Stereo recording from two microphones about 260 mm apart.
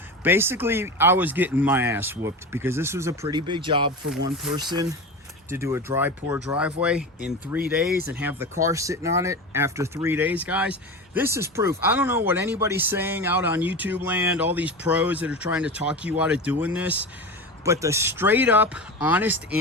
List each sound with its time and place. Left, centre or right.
0.2 s speech: centre